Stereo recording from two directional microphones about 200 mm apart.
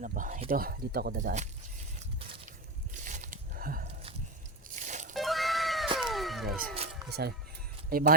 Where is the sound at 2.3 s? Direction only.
40° right (ahead or behind).